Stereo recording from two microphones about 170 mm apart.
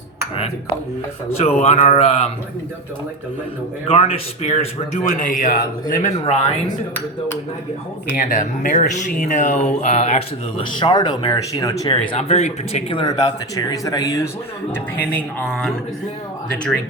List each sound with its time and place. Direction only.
1.4 s speech: 40° left (ahead or behind)
3.8 s a man's voice: 35° left (ahead or behind)
8.1 s a man's voice: 50° left (ahead or behind)
10.7 s speech: 25° left (ahead or behind)
11.9 s speech: 40° left (ahead or behind); by 14.3 s 20° left (ahead or behind)
15.1 s speech: 5° left (ahead or behind)